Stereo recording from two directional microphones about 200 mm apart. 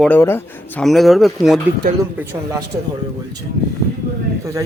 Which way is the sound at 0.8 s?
Centre (ahead or behind).